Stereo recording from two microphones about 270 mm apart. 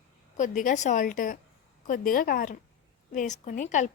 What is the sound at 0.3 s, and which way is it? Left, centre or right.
A woman's voice, left.